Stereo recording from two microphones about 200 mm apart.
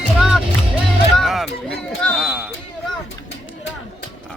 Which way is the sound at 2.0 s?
Centre (ahead or behind).